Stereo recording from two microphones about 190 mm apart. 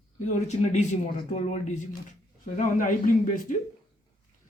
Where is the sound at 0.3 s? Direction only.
40° left (ahead or behind).